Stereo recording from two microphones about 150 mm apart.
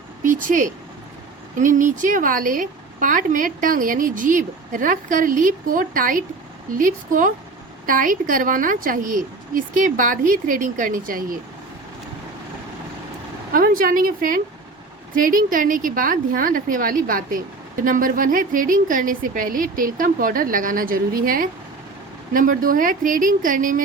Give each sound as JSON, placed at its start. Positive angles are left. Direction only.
{"t": 0.3, "sound": "a woman's voice", "side_deg": -60}
{"t": 13.5, "sound": "a woman's voice", "side_deg": -70}